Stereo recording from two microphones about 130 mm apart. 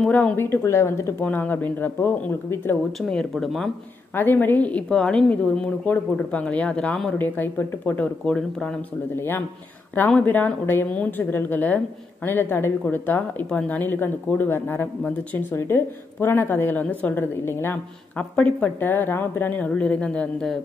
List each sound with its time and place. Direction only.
0.0 s speech: 10° left (ahead or behind)
3.0 s speech: 5° left (ahead or behind)
4.1 s speech: 15° left (ahead or behind)
9.1 s speech: 15° left (ahead or behind)